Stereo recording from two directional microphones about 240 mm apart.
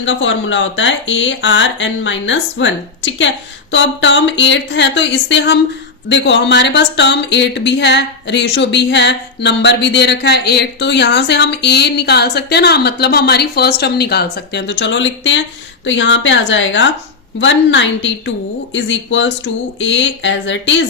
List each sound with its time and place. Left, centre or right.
0.0 s speech: left